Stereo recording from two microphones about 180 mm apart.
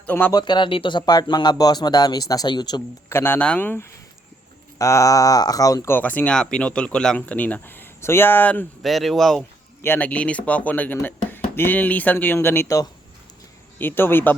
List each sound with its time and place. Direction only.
0.0 s speech: 10° left (ahead or behind)
0.3 s speech: 25° left (ahead or behind)
3.1 s speech: 10° left (ahead or behind)